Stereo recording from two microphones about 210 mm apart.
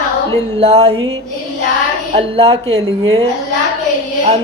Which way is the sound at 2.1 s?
30° right (ahead or behind).